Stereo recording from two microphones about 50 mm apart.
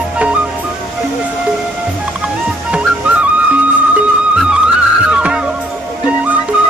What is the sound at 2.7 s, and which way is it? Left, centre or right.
Music, right.